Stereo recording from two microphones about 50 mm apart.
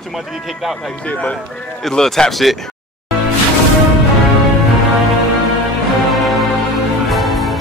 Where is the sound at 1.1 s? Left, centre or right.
Left.